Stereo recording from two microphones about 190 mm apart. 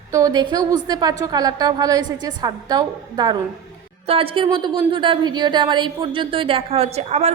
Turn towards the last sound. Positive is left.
turn(degrees=-35)  # may be behind; listen again after turning